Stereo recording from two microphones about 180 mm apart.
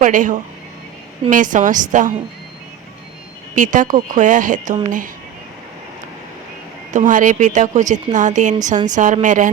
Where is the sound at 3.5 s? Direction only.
45° right (ahead or behind).